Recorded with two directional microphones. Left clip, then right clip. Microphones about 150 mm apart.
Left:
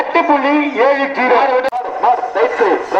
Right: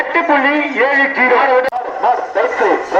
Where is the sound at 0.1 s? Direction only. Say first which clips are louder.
Even; 30° left (ahead or behind).